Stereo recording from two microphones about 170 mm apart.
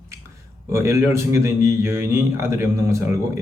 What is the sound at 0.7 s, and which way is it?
A man's voice, 15° right (ahead or behind).